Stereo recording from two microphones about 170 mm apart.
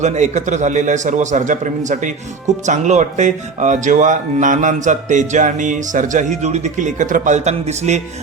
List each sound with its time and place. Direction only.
0.0 s speech: 45° right (ahead or behind)